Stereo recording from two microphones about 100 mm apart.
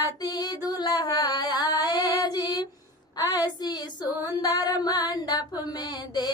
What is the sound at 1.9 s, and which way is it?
Female singing, 45° left (ahead or behind).